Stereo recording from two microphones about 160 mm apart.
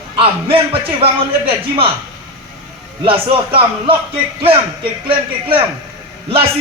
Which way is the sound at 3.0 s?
35° right (ahead or behind).